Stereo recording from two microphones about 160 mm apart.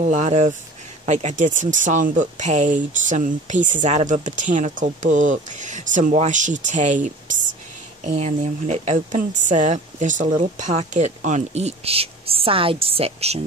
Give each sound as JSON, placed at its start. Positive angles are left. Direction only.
{"t": 0.0, "sound": "speech", "side_deg": -45}